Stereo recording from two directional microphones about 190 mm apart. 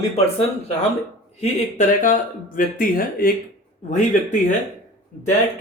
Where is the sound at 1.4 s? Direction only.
40° left (ahead or behind).